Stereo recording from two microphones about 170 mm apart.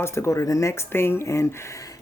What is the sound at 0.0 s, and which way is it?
Speech, 15° left (ahead or behind).